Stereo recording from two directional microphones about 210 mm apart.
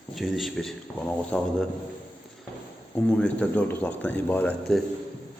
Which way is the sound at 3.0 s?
5° left (ahead or behind).